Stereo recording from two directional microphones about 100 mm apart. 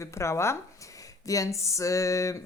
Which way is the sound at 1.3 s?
35° left (ahead or behind).